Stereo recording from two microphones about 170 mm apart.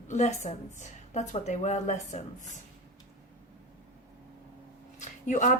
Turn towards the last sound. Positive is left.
turn(degrees=45)  # may be behind; listen again after turning